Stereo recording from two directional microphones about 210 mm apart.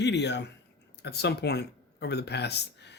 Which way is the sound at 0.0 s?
55° left (ahead or behind).